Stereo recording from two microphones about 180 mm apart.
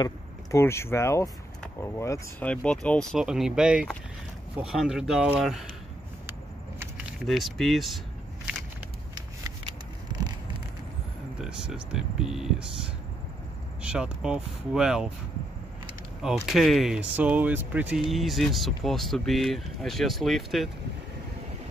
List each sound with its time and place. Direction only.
0.0 s speech: 15° left (ahead or behind)
2.5 s speech: 5° left (ahead or behind)
6.8 s speech: 5° right (ahead or behind)
11.4 s speech: 5° right (ahead or behind)
13.8 s speech: 5° right (ahead or behind)
16.2 s speech: centre (ahead or behind)